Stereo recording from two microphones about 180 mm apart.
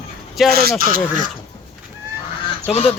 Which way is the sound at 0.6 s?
55° right (ahead or behind).